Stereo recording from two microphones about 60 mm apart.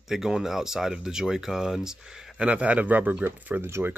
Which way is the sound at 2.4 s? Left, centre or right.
Centre.